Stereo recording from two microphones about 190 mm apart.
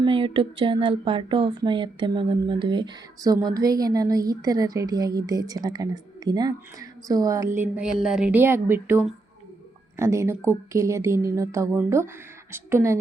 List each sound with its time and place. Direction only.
0.0 s speech: 25° right (ahead or behind)